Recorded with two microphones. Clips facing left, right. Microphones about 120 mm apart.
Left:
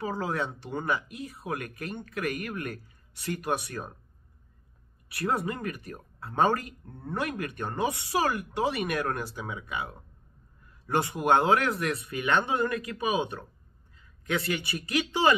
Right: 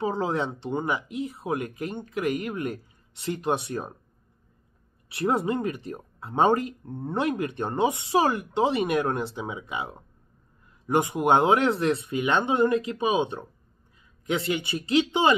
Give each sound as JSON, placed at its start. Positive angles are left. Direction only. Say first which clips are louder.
{"t": 0.0, "sound": "speech", "louder": "right 4 dB", "side_deg": -25}
{"t": 5.1, "sound": "speech", "louder": "right 5 dB", "side_deg": -25}